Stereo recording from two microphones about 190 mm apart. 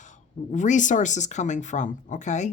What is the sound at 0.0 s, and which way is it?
Speech, 40° left (ahead or behind).